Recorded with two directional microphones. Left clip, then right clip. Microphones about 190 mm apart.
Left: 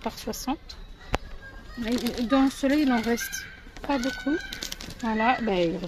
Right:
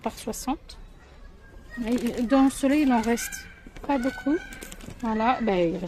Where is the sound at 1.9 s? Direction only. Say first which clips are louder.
Right 1 dB; 20° right (ahead or behind).